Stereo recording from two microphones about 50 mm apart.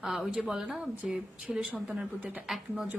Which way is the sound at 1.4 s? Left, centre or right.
Centre.